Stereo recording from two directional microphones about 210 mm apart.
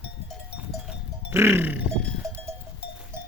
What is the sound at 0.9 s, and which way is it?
Music, 10° right (ahead or behind).